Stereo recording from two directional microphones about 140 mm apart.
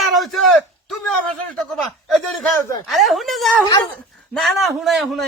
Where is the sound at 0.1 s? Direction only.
Centre (ahead or behind).